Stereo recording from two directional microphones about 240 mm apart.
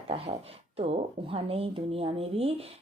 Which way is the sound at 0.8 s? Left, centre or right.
Right.